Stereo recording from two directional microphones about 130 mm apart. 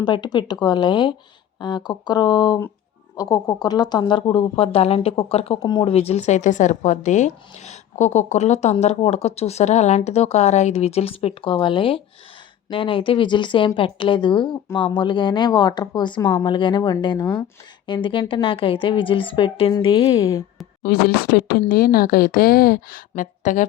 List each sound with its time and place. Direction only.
0.0 s a woman's voice: 35° left (ahead or behind)
5.6 s a woman's voice: 35° left (ahead or behind)
5.9 s a woman's voice: 50° left (ahead or behind); by 20.4 s 25° left (ahead or behind)
21.7 s a woman's voice: 90° left